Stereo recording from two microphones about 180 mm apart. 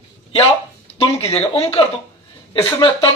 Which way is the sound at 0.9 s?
35° left (ahead or behind).